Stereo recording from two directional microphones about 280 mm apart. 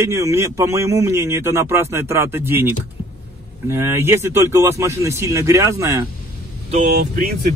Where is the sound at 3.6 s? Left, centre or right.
Centre.